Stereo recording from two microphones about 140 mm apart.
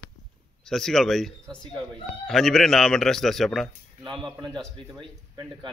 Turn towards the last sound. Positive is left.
turn(degrees=-35)  # may be behind; listen again after turning